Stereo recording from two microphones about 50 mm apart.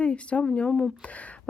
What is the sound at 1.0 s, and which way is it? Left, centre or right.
Speech, left.